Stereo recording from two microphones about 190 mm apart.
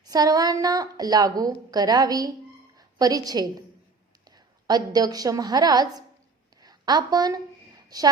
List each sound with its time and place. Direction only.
0.0 s a woman's voice: 20° right (ahead or behind)
4.6 s a woman's voice: 20° right (ahead or behind)